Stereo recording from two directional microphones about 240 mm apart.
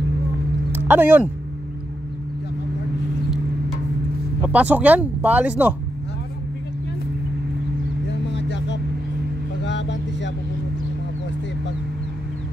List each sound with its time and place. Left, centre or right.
0.7 s a sound: centre
4.5 s speech: centre
8.1 s vehicle: left